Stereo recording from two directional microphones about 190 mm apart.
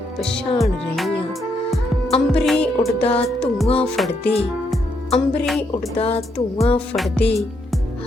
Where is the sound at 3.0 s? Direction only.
30° left (ahead or behind).